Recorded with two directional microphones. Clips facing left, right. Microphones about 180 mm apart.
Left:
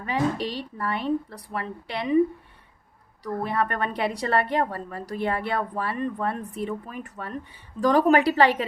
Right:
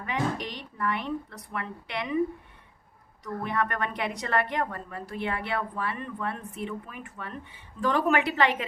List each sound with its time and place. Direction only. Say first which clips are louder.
0.0 s a woman's voice: left 4 dB; 30° left (ahead or behind)
3.2 s a woman's voice: left 3 dB; 35° left (ahead or behind)